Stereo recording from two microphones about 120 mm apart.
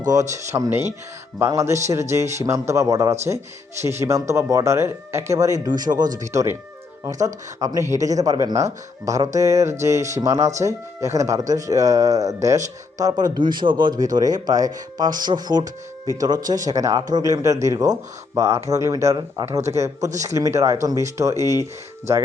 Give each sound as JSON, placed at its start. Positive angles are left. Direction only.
{"t": 0.1, "sound": "speech", "side_deg": -30}